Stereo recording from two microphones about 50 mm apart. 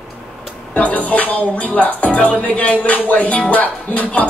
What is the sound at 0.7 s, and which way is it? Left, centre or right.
Speech, left.